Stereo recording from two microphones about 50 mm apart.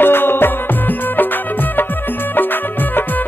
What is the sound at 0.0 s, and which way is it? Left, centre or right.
Music, left.